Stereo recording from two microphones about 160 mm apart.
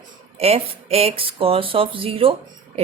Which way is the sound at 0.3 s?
40° right (ahead or behind).